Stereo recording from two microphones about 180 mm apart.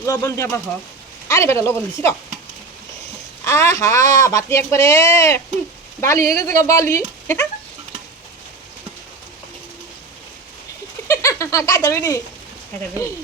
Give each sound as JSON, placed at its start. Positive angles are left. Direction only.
{"t": 0.0, "sound": "speech", "side_deg": 15}
{"t": 3.4, "sound": "speech", "side_deg": 15}
{"t": 11.1, "sound": "speech", "side_deg": 15}